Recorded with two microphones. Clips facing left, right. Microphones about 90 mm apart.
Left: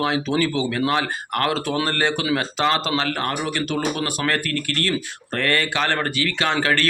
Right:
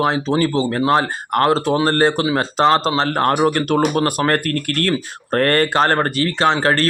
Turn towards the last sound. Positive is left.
turn(degrees=-35)  # may be behind; listen again after turning